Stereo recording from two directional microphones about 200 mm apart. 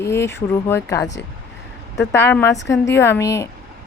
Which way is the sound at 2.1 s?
15° left (ahead or behind).